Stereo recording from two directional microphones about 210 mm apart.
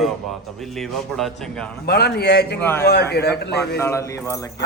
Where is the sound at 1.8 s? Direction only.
50° left (ahead or behind).